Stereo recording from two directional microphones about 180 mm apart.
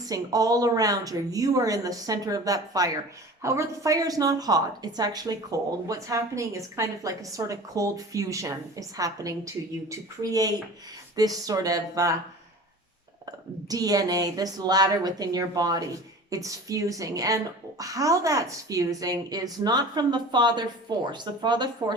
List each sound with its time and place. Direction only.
0.0 s a woman's voice: 20° right (ahead or behind)
13.2 s a woman's voice: 20° right (ahead or behind)